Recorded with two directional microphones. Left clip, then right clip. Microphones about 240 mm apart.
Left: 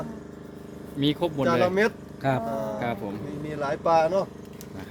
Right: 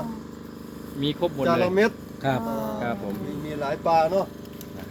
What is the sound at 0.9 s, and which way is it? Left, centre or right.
Speech, left.